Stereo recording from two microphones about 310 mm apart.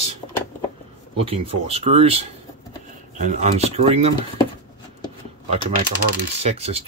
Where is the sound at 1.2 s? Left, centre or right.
Centre.